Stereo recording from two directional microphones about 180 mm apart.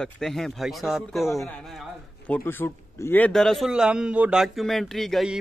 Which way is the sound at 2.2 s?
10° left (ahead or behind).